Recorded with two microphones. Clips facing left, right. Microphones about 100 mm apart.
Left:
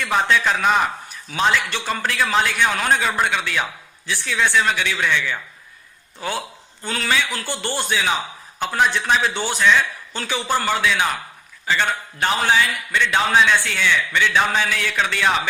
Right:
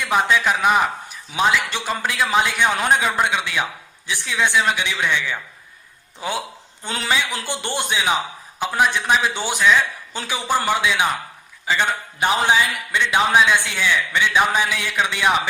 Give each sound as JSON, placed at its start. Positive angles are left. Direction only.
{"t": 0.0, "sound": "a man's voice", "side_deg": -10}